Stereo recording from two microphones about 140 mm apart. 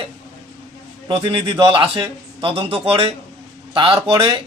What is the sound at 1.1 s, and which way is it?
A man's voice, 35° right (ahead or behind).